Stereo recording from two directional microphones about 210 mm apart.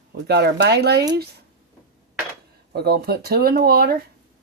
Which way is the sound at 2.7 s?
50° right (ahead or behind).